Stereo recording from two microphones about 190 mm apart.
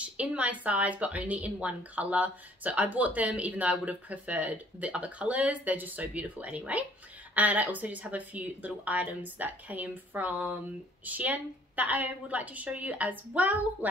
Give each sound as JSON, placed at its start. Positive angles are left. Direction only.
{"t": 0.0, "sound": "a woman's voice", "side_deg": -5}